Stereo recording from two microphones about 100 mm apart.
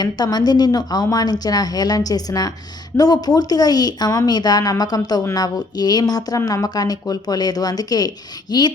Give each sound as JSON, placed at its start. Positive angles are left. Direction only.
{"t": 0.0, "sound": "a woman's voice", "side_deg": 45}